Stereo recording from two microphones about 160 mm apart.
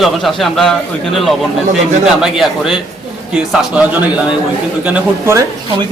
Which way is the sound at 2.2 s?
Centre (ahead or behind).